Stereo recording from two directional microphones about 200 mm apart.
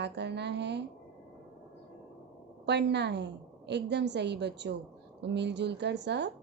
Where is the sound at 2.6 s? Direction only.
60° right (ahead or behind).